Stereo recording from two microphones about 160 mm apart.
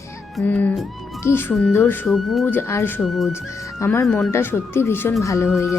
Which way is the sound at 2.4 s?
15° left (ahead or behind).